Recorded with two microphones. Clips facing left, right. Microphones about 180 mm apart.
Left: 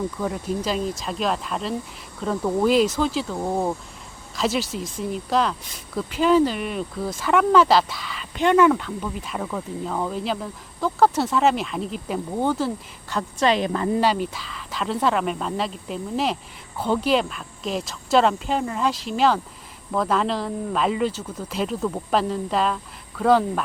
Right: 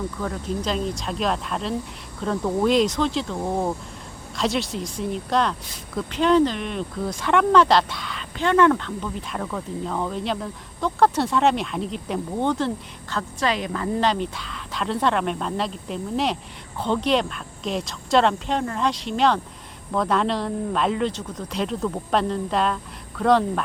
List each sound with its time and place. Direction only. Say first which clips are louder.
0.2 s speech: left 1 dB; 10° left (ahead or behind)
13.1 s speech: left 4 dB; 25° left (ahead or behind)
14.0 s speech: left 1 dB; 5° left (ahead or behind)